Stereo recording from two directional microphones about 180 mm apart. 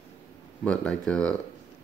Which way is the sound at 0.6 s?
5° left (ahead or behind).